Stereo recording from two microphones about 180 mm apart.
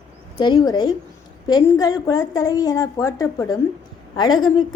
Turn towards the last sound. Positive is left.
turn(degrees=25)  # may be behind; listen again after turning